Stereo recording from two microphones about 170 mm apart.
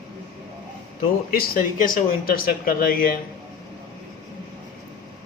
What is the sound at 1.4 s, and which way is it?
Speech, 55° left (ahead or behind).